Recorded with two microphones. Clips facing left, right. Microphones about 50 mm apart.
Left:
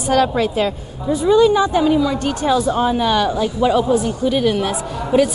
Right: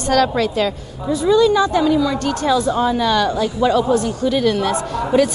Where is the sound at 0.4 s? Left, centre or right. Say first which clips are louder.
Even; centre.